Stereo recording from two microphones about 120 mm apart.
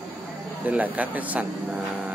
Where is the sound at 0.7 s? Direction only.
10° right (ahead or behind).